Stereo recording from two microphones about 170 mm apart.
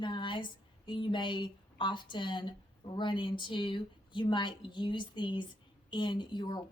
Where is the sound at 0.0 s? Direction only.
30° left (ahead or behind).